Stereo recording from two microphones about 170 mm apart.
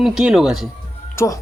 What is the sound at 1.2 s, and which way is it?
Speech, 15° left (ahead or behind).